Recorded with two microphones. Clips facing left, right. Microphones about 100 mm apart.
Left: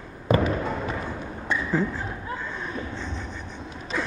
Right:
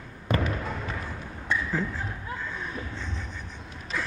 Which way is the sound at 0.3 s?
5° left (ahead or behind).